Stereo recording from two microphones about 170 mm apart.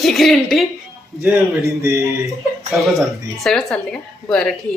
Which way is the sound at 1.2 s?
15° right (ahead or behind).